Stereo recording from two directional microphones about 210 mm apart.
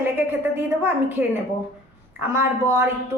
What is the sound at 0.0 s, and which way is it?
A woman's voice, 10° right (ahead or behind).